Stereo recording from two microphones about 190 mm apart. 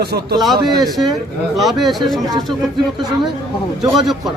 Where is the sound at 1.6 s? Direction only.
Centre (ahead or behind).